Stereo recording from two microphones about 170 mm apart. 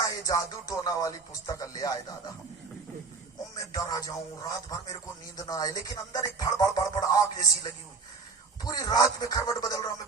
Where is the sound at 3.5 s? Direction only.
20° left (ahead or behind).